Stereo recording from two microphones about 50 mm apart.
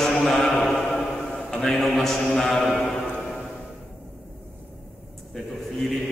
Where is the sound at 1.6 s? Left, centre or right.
Centre.